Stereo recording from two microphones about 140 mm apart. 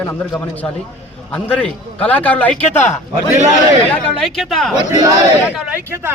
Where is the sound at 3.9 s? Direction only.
5° left (ahead or behind).